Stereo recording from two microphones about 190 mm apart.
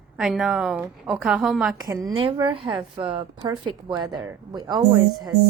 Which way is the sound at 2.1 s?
25° right (ahead or behind).